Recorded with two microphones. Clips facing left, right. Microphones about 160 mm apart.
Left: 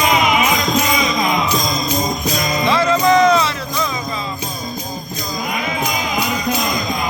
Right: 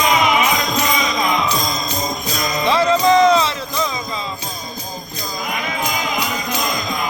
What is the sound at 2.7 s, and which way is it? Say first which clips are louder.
Music: even; 30° right (ahead or behind).